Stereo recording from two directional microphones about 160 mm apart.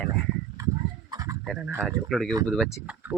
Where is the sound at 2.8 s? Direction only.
10° right (ahead or behind).